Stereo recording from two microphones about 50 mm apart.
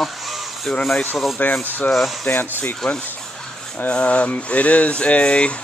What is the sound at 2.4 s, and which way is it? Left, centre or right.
Speech, left.